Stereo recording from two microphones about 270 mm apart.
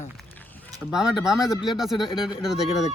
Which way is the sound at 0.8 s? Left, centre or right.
Centre.